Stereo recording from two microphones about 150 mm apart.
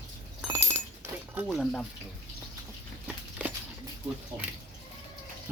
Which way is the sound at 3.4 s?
10° right (ahead or behind).